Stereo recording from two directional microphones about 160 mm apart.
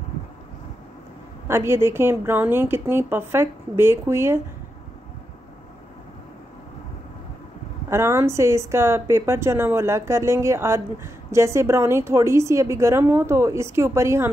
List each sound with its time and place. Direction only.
1.5 s a woman's voice: 15° right (ahead or behind)
7.9 s a woman's voice: 15° right (ahead or behind)